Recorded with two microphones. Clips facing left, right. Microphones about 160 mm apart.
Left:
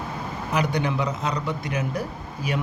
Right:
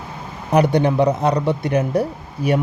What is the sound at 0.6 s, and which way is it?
Speech, 60° right (ahead or behind).